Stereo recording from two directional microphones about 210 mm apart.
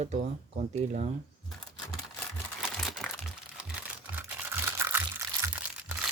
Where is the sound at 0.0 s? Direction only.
30° right (ahead or behind).